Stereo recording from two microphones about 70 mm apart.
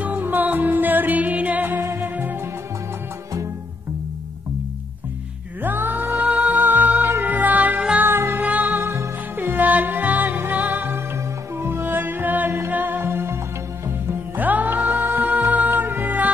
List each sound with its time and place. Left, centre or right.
0.0 s music: right
1.8 s music: right
2.0 s music: right
5.6 s music: right
8.1 s music: right
11.5 s music: right
14.4 s music: right